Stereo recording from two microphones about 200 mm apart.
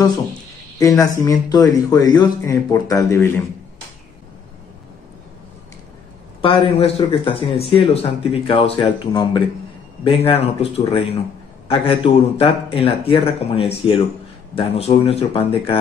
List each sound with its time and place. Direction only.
0.7 s speech: 15° left (ahead or behind)
6.4 s speech: 25° left (ahead or behind)